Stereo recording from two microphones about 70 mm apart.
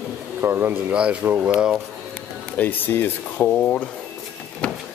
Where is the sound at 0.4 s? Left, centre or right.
Right.